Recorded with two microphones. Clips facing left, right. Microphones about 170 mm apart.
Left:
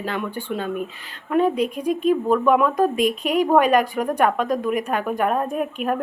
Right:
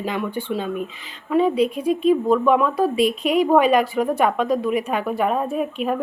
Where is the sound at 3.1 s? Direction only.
40° left (ahead or behind).